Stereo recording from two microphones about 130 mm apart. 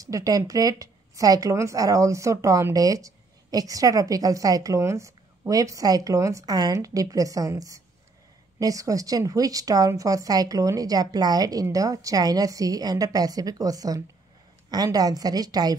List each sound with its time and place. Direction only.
0.0 s a woman's voice: 25° right (ahead or behind)